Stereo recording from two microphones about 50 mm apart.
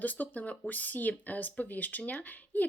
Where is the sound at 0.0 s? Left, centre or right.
Left.